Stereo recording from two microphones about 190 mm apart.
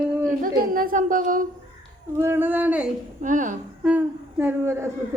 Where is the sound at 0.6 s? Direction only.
50° right (ahead or behind).